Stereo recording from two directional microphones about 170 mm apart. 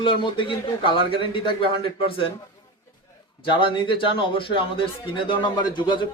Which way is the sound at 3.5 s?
30° left (ahead or behind).